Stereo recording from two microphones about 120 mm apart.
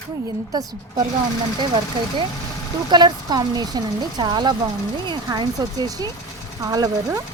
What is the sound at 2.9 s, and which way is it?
Speech, 35° right (ahead or behind).